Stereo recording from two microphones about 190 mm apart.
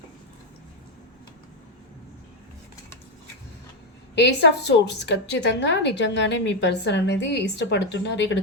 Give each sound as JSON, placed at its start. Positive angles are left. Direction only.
{"t": 4.2, "sound": "a woman's voice", "side_deg": 65}